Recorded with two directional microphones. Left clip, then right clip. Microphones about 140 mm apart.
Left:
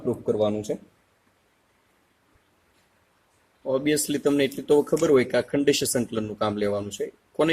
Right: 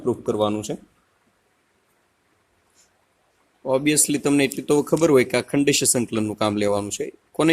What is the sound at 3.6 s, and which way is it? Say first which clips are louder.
Speech: right 4 dB; 90° right.